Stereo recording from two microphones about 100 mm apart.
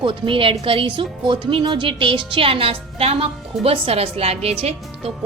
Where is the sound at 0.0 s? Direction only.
60° right (ahead or behind); by 4.5 s 90° right.